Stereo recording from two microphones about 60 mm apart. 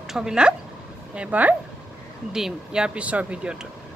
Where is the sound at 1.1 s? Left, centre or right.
Right.